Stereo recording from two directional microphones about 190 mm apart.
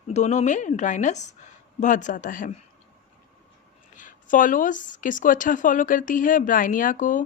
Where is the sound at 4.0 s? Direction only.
45° left (ahead or behind).